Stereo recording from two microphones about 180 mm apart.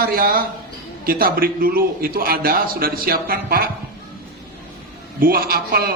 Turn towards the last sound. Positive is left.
turn(degrees=-55)  # may be behind; listen again after turning